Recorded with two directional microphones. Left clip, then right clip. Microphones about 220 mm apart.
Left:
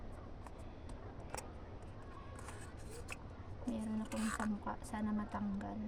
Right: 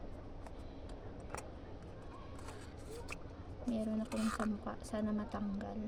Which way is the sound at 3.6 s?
15° right (ahead or behind).